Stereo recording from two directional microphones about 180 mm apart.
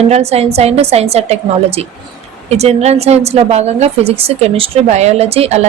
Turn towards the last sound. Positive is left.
turn(degrees=-35)  # may be behind; listen again after turning